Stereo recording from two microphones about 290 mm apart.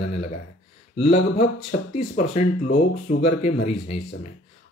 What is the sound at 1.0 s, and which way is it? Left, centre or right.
Speech, left.